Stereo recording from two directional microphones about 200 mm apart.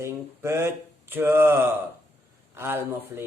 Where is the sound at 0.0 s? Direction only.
10° right (ahead or behind).